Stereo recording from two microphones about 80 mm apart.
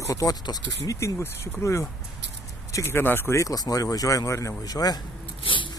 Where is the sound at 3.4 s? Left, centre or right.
Left.